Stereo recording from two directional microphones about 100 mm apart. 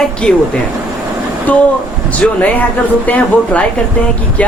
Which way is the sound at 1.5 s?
15° left (ahead or behind).